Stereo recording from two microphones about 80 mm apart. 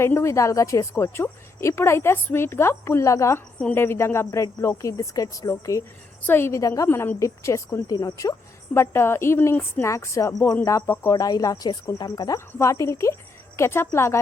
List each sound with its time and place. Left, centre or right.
0.0 s a woman's voice: left
6.2 s a woman's voice: left
6.8 s a woman's voice: left
7.9 s a woman's voice: left
10.8 s speech: left
11.1 s a woman's voice: left